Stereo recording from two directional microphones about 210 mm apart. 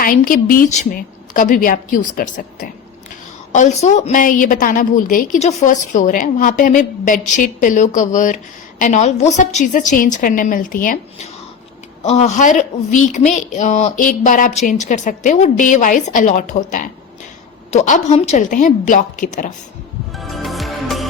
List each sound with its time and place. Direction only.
0.0 s a woman's voice: 40° left (ahead or behind)
20.1 s music: centre (ahead or behind)